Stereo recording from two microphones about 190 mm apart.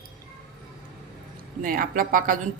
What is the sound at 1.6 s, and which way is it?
Speech, 45° right (ahead or behind).